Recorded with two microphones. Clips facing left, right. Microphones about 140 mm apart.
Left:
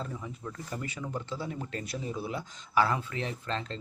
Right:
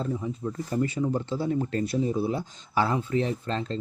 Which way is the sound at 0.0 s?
30° right (ahead or behind).